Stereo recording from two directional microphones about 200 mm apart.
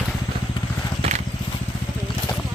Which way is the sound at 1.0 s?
35° right (ahead or behind).